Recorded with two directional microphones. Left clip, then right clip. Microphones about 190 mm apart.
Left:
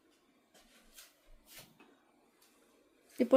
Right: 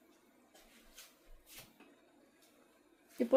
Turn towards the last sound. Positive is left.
turn(degrees=30)  # may be behind; listen again after turning